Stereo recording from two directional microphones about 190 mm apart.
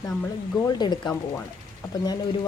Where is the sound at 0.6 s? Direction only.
20° left (ahead or behind).